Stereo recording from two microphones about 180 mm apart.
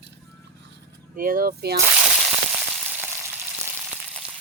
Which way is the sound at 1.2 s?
55° right (ahead or behind).